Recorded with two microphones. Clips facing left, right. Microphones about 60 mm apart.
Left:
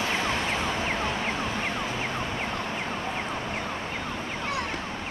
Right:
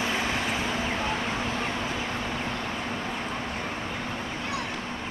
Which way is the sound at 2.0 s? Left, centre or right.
Left.